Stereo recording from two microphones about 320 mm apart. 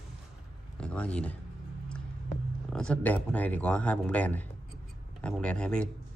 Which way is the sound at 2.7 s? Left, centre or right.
Centre.